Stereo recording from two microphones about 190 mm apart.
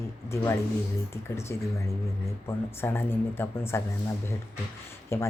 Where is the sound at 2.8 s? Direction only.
10° left (ahead or behind).